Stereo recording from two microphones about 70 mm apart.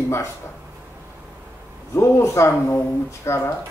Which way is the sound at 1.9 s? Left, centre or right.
Left.